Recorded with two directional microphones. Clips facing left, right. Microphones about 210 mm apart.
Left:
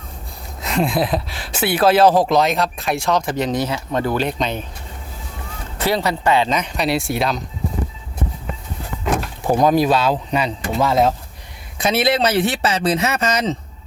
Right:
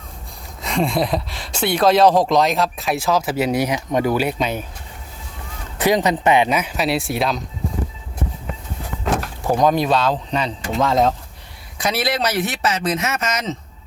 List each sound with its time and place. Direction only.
0.6 s speech: centre (ahead or behind)
5.8 s speech: 15° right (ahead or behind); by 7.4 s centre (ahead or behind)
9.1 s speech: 10° left (ahead or behind)
11.8 s speech: 25° left (ahead or behind)